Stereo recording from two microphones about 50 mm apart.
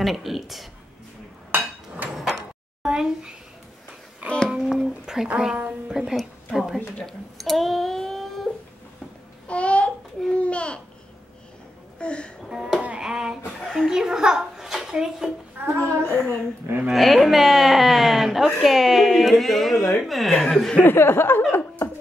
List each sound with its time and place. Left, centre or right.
0.0 s a woman's voice: centre
2.2 s a sound: centre
4.2 s a child's voice: right
4.6 s a sound: centre
5.3 s a woman's voice: centre
7.0 s a sound: centre
9.5 s babbling: left
12.0 s music: left
12.4 s a sound: centre
13.7 s a child's voice: centre
15.6 s a woman's voice: right
16.9 s a woman's voice: centre
20.8 s speech: left
21.5 s chuckle: left